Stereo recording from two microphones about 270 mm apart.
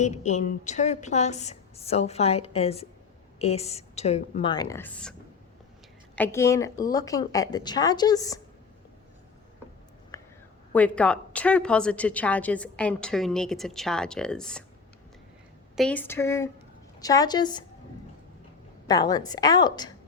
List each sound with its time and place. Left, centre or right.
0.0 s a woman's voice: left; by 5.1 s centre
6.1 s a woman's voice: centre
10.1 s whispering: centre
10.7 s a woman's voice: centre
15.7 s a woman's voice: centre
18.9 s a woman's voice: centre